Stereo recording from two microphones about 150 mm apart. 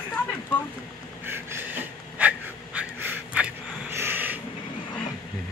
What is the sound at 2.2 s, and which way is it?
Gasp, 10° right (ahead or behind).